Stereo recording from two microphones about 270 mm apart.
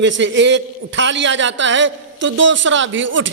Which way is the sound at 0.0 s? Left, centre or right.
Right.